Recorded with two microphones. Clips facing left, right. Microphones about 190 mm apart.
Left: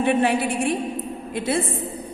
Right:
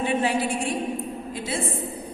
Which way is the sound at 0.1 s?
60° left (ahead or behind).